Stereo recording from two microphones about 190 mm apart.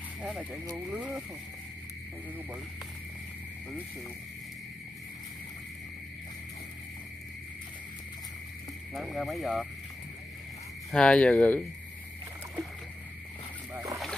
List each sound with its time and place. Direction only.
0.2 s speech: 5° right (ahead or behind)
8.9 s speech: centre (ahead or behind)
10.9 s speech: 5° left (ahead or behind)
13.7 s splash: 15° right (ahead or behind)